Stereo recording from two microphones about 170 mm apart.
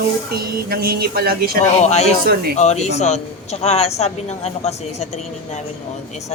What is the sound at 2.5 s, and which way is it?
A woman's voice, 40° left (ahead or behind).